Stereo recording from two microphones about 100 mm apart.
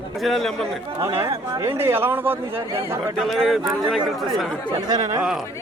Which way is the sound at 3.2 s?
Centre (ahead or behind).